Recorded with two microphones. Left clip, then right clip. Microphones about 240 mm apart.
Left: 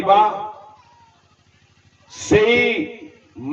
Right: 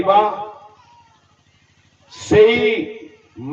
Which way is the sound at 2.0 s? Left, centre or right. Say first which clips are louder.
Right 3 dB; left.